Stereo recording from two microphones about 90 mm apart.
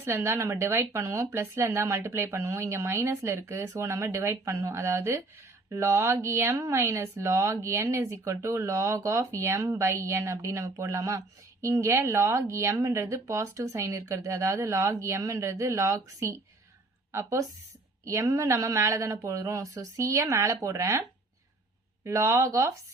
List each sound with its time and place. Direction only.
0.0 s speech: 30° right (ahead or behind)
22.0 s speech: 35° right (ahead or behind)